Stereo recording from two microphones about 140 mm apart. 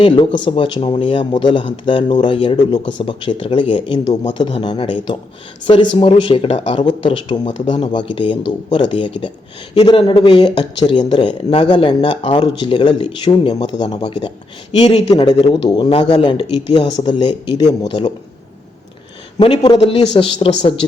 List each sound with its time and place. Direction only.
0.0 s speech: 35° left (ahead or behind)
14.8 s speech: 50° left (ahead or behind)
15.6 s speech: 35° left (ahead or behind)
19.4 s speech: 35° left (ahead or behind)